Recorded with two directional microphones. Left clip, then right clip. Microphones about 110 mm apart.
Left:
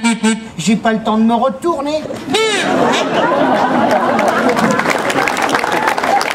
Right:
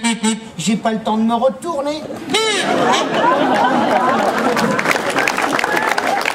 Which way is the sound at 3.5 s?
20° right (ahead or behind).